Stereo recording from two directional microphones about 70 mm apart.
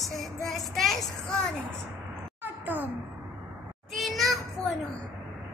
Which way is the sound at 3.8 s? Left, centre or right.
Centre.